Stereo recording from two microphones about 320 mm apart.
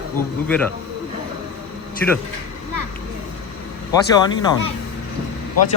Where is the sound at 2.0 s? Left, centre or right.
Centre.